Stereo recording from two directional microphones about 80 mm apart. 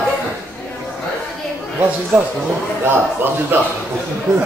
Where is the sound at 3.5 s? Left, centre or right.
Right.